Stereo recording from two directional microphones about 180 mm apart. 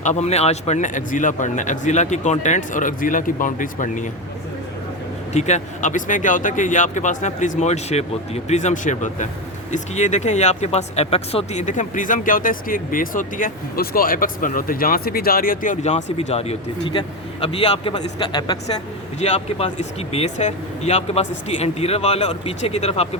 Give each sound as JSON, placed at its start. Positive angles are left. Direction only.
{"t": 0.0, "sound": "speech", "side_deg": 40}
{"t": 5.3, "sound": "speech", "side_deg": 40}
{"t": 19.2, "sound": "speech", "side_deg": 35}